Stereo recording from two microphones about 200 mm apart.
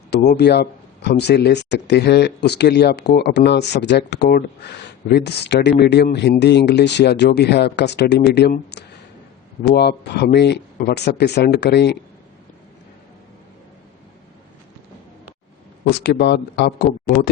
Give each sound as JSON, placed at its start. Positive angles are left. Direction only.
{"t": 0.3, "sound": "speech", "side_deg": 55}
{"t": 15.9, "sound": "speech", "side_deg": 55}